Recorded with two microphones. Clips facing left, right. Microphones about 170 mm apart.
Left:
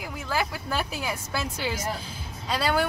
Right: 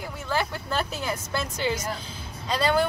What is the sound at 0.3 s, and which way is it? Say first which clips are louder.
Speech: right 1 dB; 5° left (ahead or behind).